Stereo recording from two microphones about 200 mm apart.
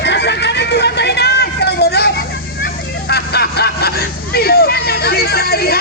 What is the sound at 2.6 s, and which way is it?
Hubbub, 55° left (ahead or behind).